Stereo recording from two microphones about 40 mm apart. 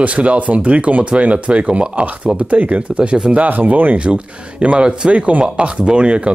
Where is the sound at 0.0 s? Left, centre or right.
Right.